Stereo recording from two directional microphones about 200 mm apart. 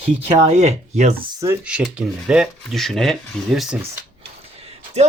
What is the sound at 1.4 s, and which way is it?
Speech, 10° right (ahead or behind).